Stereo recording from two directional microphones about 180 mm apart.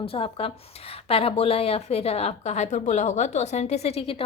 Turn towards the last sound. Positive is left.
turn(degrees=30)  # may be behind; listen again after turning